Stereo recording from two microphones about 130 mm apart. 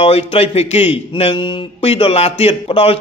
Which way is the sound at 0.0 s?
50° left (ahead or behind).